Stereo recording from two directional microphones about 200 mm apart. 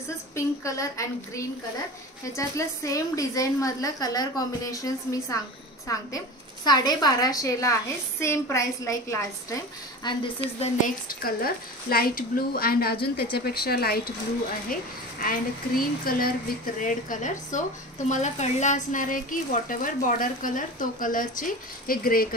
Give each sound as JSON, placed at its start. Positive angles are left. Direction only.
{"t": 0.4, "sound": "a woman's voice", "side_deg": 15}
{"t": 10.8, "sound": "a woman's voice", "side_deg": 45}